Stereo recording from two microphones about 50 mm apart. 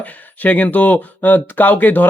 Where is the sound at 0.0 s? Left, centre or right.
Left.